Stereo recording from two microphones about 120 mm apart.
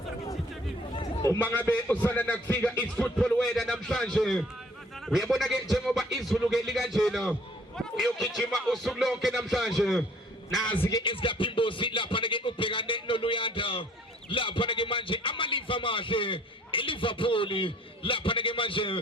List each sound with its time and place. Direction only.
1.4 s a man's voice: 15° left (ahead or behind); by 10.0 s centre (ahead or behind)
11.0 s music: 45° left (ahead or behind)
14.3 s a man's voice: 45° left (ahead or behind)